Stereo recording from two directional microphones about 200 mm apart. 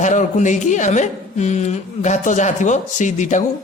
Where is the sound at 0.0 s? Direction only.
40° left (ahead or behind).